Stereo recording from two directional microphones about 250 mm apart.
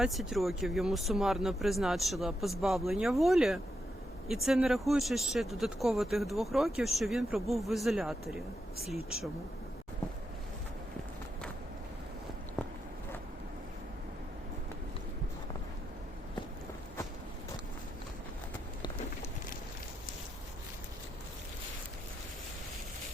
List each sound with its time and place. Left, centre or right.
0.0 s speech: centre